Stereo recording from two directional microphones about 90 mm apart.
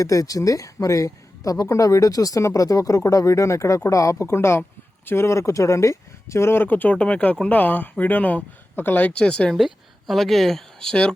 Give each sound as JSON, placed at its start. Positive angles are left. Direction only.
{"t": 0.0, "sound": "speech", "side_deg": 40}
{"t": 9.6, "sound": "speech", "side_deg": 0}